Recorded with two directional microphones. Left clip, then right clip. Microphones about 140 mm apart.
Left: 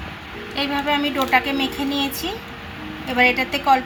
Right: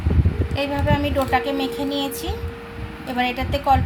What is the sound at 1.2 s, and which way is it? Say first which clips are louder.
Speech: left 2 dB; 30° right (ahead or behind).